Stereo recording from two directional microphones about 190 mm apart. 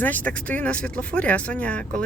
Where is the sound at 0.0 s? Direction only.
10° left (ahead or behind).